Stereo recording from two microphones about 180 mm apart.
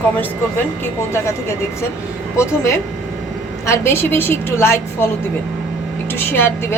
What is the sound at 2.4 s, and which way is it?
Speech, 15° left (ahead or behind).